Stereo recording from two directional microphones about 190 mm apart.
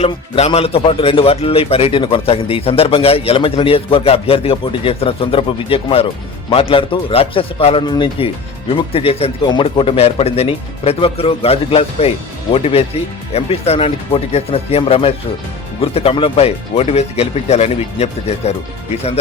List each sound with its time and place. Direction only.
0.0 s a man's voice: 30° left (ahead or behind)